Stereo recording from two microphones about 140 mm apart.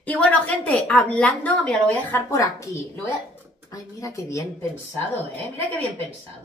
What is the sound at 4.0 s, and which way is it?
Speech, 25° left (ahead or behind).